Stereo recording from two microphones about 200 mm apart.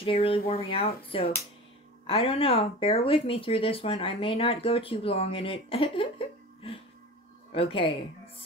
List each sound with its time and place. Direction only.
0.0 s speech: 30° left (ahead or behind)